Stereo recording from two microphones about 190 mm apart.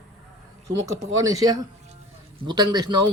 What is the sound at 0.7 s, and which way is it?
Speech, 20° right (ahead or behind).